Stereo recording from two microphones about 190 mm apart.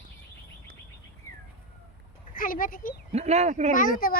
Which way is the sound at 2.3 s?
45° left (ahead or behind).